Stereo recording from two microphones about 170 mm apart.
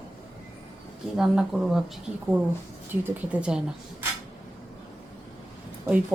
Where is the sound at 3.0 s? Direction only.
5° right (ahead or behind).